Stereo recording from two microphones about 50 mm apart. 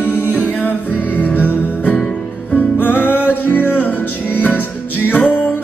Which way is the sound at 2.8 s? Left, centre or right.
Left.